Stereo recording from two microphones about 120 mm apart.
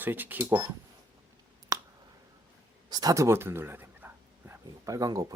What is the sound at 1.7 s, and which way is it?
Finger snapping, 25° right (ahead or behind).